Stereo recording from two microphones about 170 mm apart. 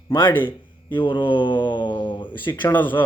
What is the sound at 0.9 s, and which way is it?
Speech, 30° left (ahead or behind).